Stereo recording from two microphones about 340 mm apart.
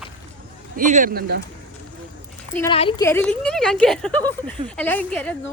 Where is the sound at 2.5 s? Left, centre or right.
Centre.